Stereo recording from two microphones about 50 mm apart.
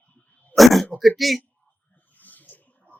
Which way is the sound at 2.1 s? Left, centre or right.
Left.